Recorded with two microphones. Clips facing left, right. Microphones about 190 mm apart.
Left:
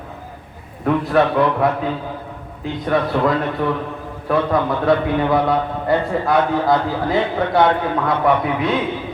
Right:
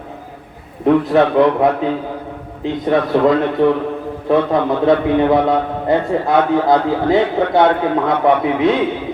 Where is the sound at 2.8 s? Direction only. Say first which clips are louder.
Right 4 dB; 20° right (ahead or behind).